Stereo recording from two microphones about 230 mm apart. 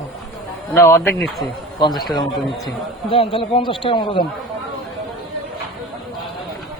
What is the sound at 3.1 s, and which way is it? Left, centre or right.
Speech, left.